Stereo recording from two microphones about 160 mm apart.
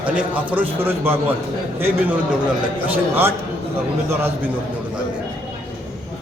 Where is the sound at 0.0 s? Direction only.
10° right (ahead or behind).